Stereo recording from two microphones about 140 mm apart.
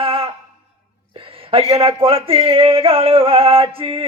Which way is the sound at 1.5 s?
40° right (ahead or behind).